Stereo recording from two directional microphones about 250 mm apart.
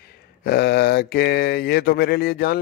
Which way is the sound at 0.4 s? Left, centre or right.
Left.